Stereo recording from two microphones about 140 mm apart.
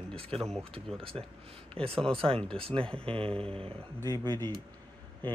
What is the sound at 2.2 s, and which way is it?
Speech, 40° right (ahead or behind).